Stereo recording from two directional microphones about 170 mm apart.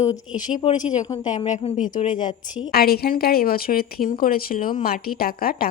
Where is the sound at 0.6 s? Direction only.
25° left (ahead or behind).